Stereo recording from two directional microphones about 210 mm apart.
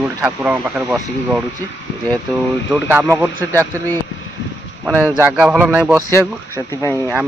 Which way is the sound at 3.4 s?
10° left (ahead or behind).